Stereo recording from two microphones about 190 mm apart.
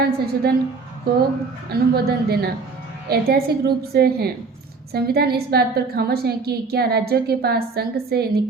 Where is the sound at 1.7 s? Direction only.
55° right (ahead or behind).